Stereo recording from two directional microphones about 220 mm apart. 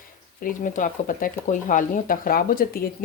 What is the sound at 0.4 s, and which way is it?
Speech, 35° left (ahead or behind).